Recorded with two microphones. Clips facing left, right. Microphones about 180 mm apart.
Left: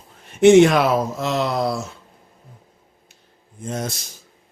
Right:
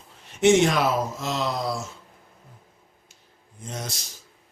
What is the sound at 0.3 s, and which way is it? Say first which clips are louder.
Speech: left 7 dB; 60° left (ahead or behind).